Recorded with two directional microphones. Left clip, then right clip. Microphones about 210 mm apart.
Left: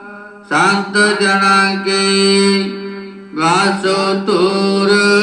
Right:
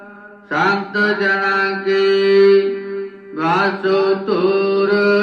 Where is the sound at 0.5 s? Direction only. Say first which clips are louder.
Left 4 dB; 40° left (ahead or behind).